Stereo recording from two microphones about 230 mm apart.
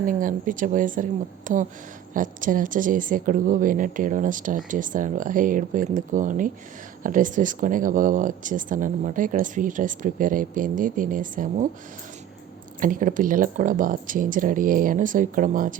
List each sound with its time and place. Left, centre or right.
0.0 s speech: right
12.8 s speech: right